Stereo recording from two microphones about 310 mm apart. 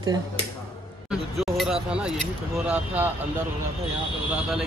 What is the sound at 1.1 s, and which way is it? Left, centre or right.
Speech, centre.